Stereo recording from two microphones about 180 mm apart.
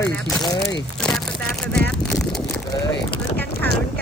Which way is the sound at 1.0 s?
5° left (ahead or behind).